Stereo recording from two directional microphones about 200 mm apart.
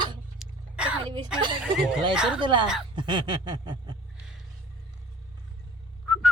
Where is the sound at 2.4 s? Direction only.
25° right (ahead or behind).